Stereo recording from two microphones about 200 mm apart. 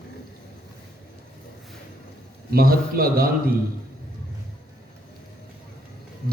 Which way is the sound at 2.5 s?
50° right (ahead or behind).